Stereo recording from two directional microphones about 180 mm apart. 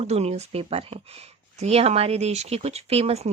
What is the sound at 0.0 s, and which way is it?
Speech, 35° right (ahead or behind).